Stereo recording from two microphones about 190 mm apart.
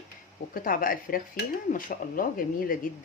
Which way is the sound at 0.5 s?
45° left (ahead or behind).